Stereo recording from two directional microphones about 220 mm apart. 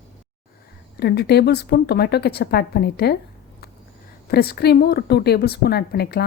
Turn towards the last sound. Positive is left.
turn(degrees=45)  # may be behind; listen again after turning